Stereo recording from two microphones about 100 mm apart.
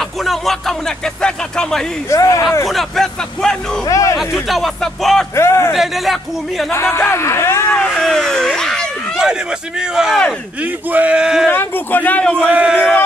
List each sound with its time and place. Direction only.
0.0 s speech: centre (ahead or behind)
2.0 s speech: 30° left (ahead or behind)
2.6 s speech: centre (ahead or behind)
3.8 s speech: 35° left (ahead or behind)
4.2 s speech: centre (ahead or behind)
5.3 s speech: 30° left (ahead or behind)
5.7 s speech: centre (ahead or behind)
6.7 s speech: 25° left (ahead or behind)
7.8 s a sound: 5° left (ahead or behind)
9.3 s speech: 5° right (ahead or behind)
11.5 s speech: 20° left (ahead or behind)
12.4 s speech: 10° right (ahead or behind)